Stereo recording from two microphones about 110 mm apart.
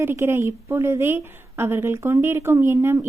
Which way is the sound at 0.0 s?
20° right (ahead or behind).